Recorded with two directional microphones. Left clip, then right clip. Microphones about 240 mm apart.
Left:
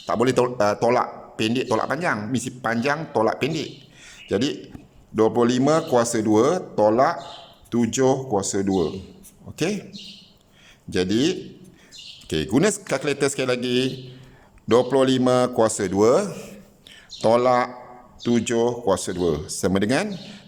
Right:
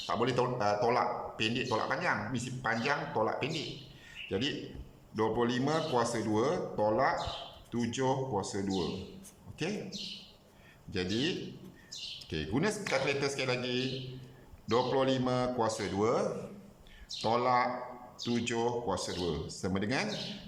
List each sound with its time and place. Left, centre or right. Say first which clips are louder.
0.0 s speech: left 11 dB; left
10.9 s speech: left 12 dB; left